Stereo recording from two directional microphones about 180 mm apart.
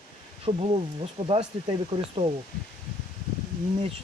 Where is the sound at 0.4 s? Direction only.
30° right (ahead or behind).